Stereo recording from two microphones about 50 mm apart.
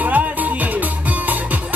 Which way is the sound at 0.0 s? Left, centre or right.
Right.